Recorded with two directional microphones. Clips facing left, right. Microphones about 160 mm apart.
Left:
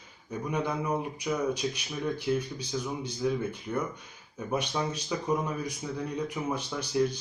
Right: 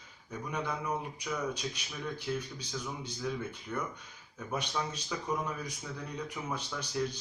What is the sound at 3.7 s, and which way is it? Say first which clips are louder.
Speech: left 5 dB; 25° left (ahead or behind).